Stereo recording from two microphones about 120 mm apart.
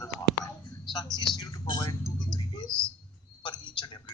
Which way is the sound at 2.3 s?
40° left (ahead or behind).